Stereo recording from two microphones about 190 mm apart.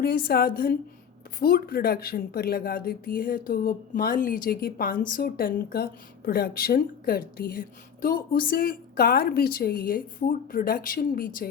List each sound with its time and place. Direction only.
0.0 s speech: 50° left (ahead or behind)